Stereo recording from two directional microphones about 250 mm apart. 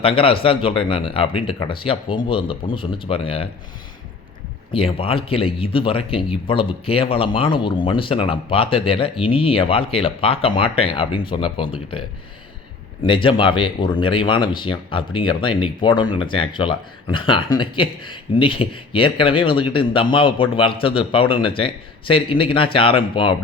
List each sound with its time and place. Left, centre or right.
0.0 s speech: left
4.7 s speech: left
13.0 s speech: centre